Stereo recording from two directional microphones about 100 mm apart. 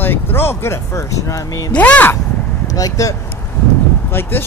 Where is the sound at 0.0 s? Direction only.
20° left (ahead or behind).